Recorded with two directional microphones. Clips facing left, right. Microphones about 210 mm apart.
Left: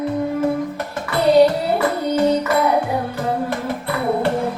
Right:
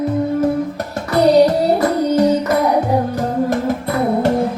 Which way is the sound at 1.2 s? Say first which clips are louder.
Right 1 dB; 40° right (ahead or behind).